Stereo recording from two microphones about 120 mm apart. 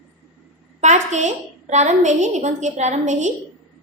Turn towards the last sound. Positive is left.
turn(degrees=-80)